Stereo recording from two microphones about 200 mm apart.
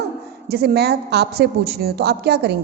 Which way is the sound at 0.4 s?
55° right (ahead or behind).